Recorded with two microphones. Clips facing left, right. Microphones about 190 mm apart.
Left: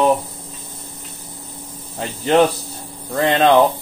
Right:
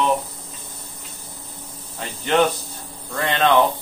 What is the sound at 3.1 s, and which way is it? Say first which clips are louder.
Speech: left 5 dB; 25° left (ahead or behind).